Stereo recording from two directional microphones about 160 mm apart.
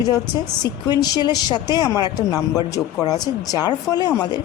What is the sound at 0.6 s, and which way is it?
A woman's voice, 25° left (ahead or behind).